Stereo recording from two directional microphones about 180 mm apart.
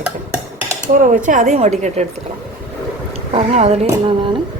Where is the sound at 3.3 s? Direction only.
35° right (ahead or behind).